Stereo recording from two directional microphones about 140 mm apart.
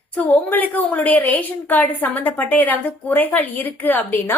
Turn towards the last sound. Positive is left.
turn(degrees=15)  # may be behind; listen again after turning